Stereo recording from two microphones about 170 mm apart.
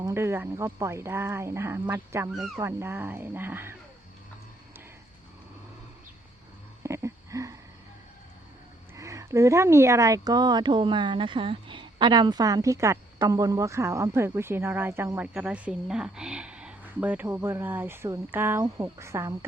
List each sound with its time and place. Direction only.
0.0 s speech: 15° right (ahead or behind)
6.8 s a sound: 15° right (ahead or behind)
9.0 s speech: 20° right (ahead or behind)